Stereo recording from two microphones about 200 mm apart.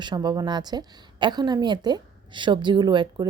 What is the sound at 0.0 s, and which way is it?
A woman's voice, 20° right (ahead or behind).